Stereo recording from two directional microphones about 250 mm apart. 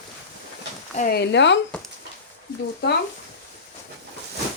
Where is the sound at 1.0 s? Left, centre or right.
Left.